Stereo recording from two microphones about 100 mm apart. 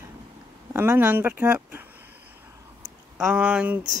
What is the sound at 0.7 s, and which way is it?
Speech, 20° right (ahead or behind).